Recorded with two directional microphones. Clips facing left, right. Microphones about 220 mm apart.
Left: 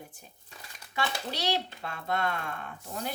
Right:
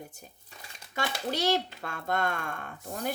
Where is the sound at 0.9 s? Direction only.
50° right (ahead or behind).